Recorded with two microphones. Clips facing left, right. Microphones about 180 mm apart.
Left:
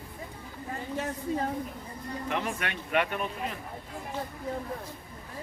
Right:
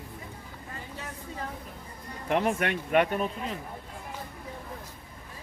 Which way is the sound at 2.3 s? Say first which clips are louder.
Right 7 dB; 55° right (ahead or behind).